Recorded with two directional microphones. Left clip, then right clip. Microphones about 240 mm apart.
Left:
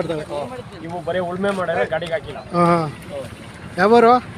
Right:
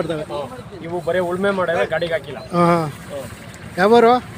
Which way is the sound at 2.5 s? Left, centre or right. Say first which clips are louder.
Even; centre.